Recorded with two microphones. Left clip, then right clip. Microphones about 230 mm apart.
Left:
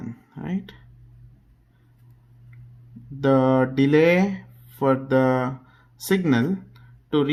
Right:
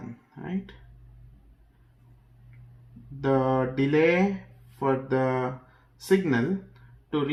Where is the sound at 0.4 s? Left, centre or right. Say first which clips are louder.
Left 3 dB; left.